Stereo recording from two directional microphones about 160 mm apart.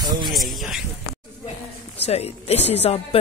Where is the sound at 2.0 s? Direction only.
40° left (ahead or behind).